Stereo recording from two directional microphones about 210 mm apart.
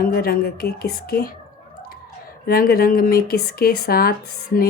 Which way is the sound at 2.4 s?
45° left (ahead or behind).